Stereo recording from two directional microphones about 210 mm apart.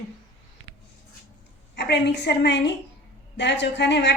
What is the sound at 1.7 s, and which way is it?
A woman's voice, 55° left (ahead or behind).